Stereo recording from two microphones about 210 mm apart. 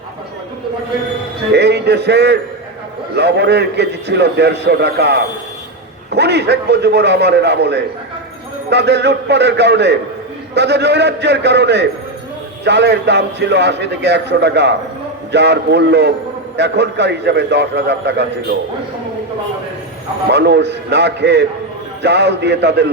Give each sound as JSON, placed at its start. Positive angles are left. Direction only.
{"t": 1.5, "sound": "a man's voice", "side_deg": -50}
{"t": 20.3, "sound": "a man's voice", "side_deg": -55}